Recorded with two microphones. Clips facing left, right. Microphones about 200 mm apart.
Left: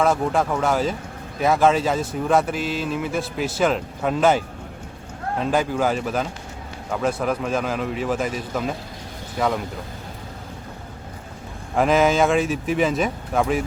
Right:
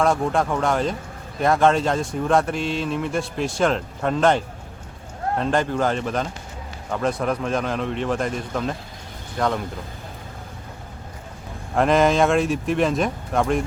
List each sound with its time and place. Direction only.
0.0 s speech: 5° left (ahead or behind)
11.7 s speech: centre (ahead or behind)